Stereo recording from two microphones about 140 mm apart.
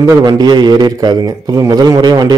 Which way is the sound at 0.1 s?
30° right (ahead or behind).